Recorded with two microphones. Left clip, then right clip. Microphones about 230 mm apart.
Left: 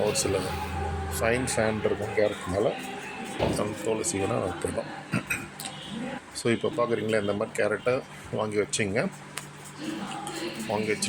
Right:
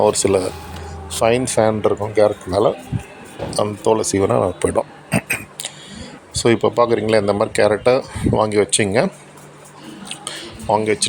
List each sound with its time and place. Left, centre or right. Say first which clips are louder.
0.0 s speech: right 11 dB; right
5.1 s a sound: right 10 dB; right
6.3 s speech: right 12 dB; right